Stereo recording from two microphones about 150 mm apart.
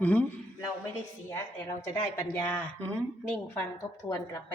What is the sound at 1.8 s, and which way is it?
A woman's voice, 15° left (ahead or behind).